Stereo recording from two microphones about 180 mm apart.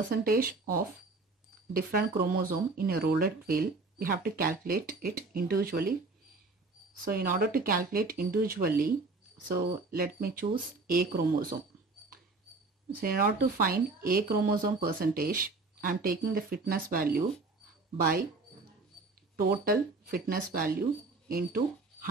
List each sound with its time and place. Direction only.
0.1 s speech: 55° right (ahead or behind)
7.1 s speech: 55° right (ahead or behind)
13.0 s speech: 55° right (ahead or behind)
19.3 s speech: 55° right (ahead or behind)